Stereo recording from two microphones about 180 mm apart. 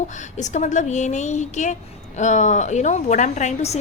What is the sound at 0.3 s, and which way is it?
A woman's voice, 40° left (ahead or behind).